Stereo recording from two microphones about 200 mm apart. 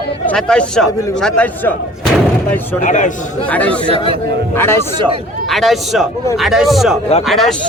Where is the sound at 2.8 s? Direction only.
40° left (ahead or behind).